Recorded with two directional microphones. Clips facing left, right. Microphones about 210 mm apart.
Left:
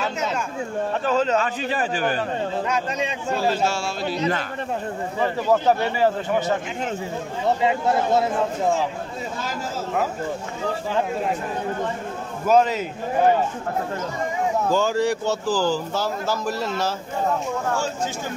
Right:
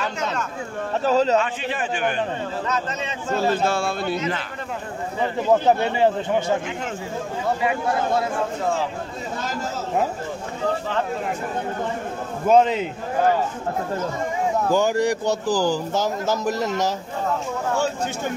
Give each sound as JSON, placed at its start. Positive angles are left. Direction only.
{"t": 0.0, "sound": "speech", "side_deg": 10}
{"t": 1.0, "sound": "speech", "side_deg": -35}
{"t": 1.4, "sound": "a man's voice", "side_deg": 40}
{"t": 2.7, "sound": "speech", "side_deg": 10}
{"t": 3.6, "sound": "speech", "side_deg": -55}
{"t": 4.2, "sound": "a man's voice", "side_deg": 40}
{"t": 5.5, "sound": "speech", "side_deg": -20}
{"t": 7.4, "sound": "speech", "side_deg": 25}
{"t": 12.4, "sound": "speech", "side_deg": -25}
{"t": 14.7, "sound": "speech", "side_deg": -15}